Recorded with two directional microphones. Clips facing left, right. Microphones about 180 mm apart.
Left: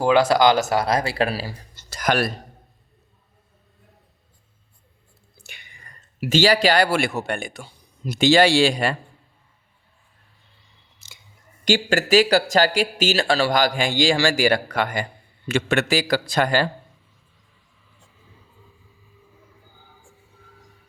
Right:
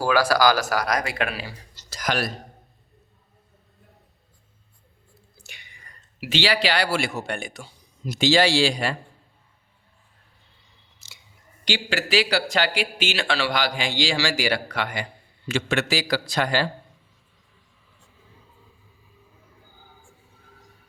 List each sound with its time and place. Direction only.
0.0 s speech: 25° left (ahead or behind)
1.7 s a sound: 55° left (ahead or behind)
5.4 s whispering: 55° left (ahead or behind)
6.1 s speech: 45° left (ahead or behind)
11.0 s chewing: 55° left (ahead or behind)
11.6 s a man's voice: 45° left (ahead or behind)